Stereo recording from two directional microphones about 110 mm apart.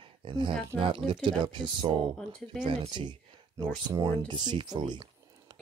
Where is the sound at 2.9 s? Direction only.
45° right (ahead or behind).